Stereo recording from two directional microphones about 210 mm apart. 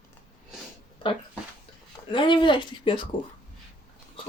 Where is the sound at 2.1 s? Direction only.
25° left (ahead or behind).